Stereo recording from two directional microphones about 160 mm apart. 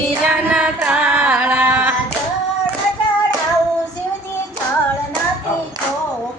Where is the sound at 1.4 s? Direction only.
10° right (ahead or behind).